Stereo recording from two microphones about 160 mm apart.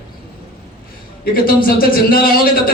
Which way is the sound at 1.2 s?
65° left (ahead or behind).